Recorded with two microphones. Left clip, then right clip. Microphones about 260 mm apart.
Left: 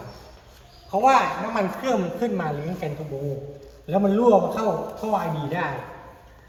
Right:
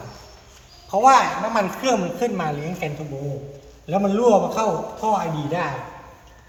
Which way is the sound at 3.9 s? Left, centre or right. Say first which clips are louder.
Right 1 dB; right.